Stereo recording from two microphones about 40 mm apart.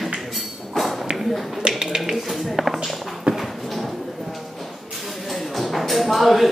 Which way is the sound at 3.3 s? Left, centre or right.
Right.